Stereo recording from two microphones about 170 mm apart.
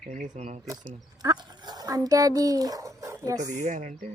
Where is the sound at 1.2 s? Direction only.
25° right (ahead or behind).